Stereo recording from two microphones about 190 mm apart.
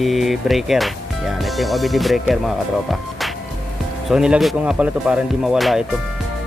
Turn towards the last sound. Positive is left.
turn(degrees=0)  # may be behind; listen again after turning